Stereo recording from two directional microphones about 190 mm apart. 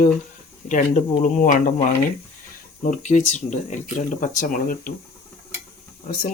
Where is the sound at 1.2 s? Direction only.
45° left (ahead or behind).